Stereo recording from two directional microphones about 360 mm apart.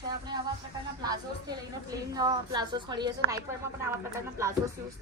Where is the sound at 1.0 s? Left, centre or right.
Centre.